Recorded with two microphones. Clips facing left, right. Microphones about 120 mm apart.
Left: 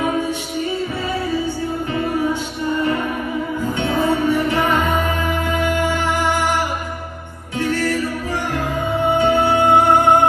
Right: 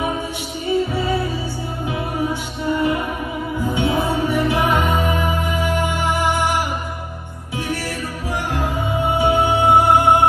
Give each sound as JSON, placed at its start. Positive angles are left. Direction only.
{"t": 3.7, "sound": "music", "side_deg": -15}
{"t": 7.6, "sound": "music", "side_deg": -10}
{"t": 9.2, "sound": "music", "side_deg": -15}